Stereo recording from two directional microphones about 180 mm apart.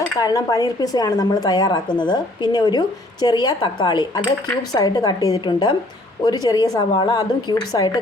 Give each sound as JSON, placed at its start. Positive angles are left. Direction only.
{"t": 0.0, "sound": "speech", "side_deg": 20}